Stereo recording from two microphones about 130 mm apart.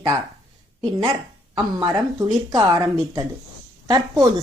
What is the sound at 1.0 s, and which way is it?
A woman's voice, 40° right (ahead or behind).